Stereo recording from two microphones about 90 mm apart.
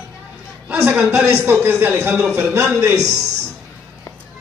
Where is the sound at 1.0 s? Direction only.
10° right (ahead or behind).